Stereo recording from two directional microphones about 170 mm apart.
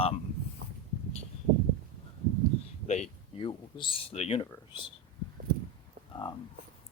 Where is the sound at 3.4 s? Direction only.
35° left (ahead or behind).